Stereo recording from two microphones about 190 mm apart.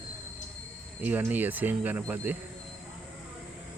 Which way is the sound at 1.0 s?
10° right (ahead or behind).